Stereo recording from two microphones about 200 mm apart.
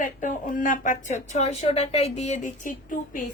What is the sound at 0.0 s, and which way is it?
Speech, 40° left (ahead or behind).